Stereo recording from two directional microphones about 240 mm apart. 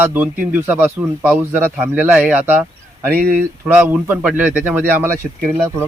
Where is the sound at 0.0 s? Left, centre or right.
Centre.